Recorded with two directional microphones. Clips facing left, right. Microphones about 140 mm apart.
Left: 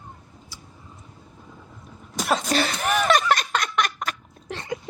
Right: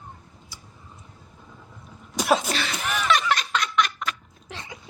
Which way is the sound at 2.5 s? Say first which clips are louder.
Left 5 dB; 40° left (ahead or behind).